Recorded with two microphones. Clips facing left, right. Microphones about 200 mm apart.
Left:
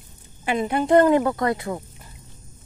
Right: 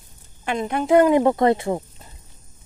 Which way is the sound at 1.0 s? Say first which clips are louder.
Right 2 dB; 20° right (ahead or behind).